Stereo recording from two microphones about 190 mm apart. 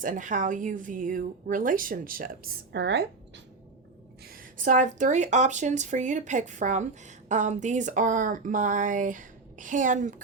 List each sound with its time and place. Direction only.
0.0 s speech: 40° right (ahead or behind); by 3.4 s 65° right (ahead or behind)
4.2 s speech: 50° right (ahead or behind)